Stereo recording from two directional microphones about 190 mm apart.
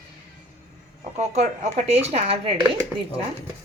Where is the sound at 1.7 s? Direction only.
35° right (ahead or behind).